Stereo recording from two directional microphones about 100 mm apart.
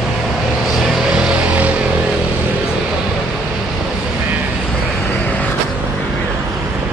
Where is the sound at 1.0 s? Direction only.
5° right (ahead or behind).